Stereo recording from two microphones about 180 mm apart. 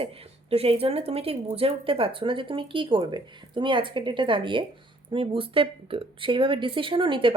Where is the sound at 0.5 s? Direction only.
35° right (ahead or behind).